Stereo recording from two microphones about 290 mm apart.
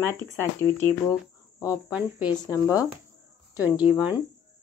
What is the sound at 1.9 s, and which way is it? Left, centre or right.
Speech, centre.